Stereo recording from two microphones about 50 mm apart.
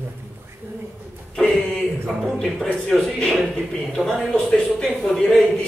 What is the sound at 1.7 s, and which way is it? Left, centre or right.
A man's voice, centre.